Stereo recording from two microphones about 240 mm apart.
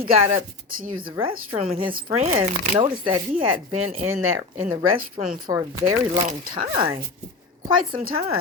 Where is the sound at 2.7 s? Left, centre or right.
Right.